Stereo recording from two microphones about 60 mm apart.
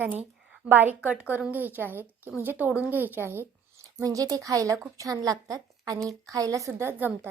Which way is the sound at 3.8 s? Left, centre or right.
Right.